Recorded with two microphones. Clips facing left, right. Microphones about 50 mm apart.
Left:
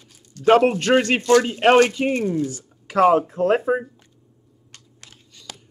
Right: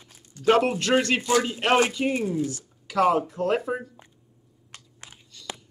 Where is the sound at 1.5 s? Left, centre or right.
Left.